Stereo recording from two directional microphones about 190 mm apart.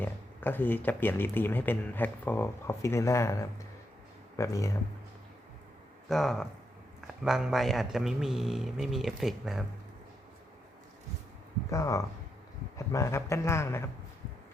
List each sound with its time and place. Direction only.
0.0 s speech: 10° left (ahead or behind)
4.4 s speech: 15° left (ahead or behind)
6.1 s a man's voice: centre (ahead or behind)
11.7 s speech: 15° left (ahead or behind)